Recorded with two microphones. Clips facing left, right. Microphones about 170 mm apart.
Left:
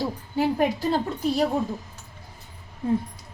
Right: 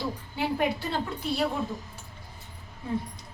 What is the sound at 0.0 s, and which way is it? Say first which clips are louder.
A woman's voice: left 6 dB; 40° left (ahead or behind).